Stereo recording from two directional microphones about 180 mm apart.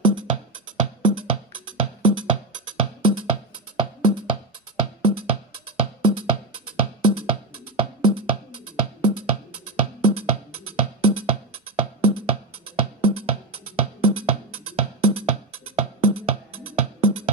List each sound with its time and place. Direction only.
1.0 s music: 30° right (ahead or behind)